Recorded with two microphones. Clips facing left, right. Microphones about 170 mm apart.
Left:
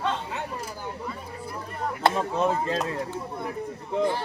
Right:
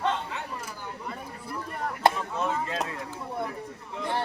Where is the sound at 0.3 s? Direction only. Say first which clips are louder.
Left 3 dB; 40° left (ahead or behind).